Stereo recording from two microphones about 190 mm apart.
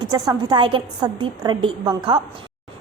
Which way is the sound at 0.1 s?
20° right (ahead or behind).